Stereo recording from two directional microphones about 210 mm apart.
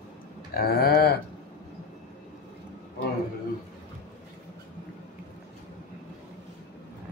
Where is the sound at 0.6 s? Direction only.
45° left (ahead or behind).